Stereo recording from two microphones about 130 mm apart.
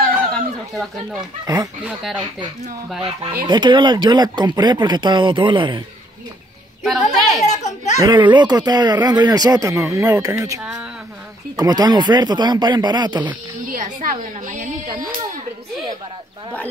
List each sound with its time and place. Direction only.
0.3 s a sound: centre (ahead or behind)
1.4 s speech: 30° right (ahead or behind)
1.9 s speech: 10° right (ahead or behind)
3.4 s speech: 35° right (ahead or behind)
6.8 s a woman's voice: centre (ahead or behind)
7.4 s a child's voice: 60° left (ahead or behind)
8.0 s speech: 35° right (ahead or behind)
13.7 s speech: 80° right